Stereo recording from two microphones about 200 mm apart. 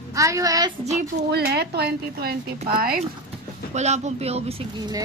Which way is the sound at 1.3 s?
55° right (ahead or behind).